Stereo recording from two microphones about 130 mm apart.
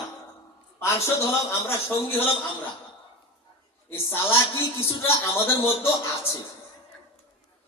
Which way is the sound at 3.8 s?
20° left (ahead or behind).